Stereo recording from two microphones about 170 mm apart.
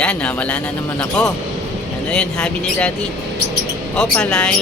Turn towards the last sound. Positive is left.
turn(degrees=5)  # may be behind; listen again after turning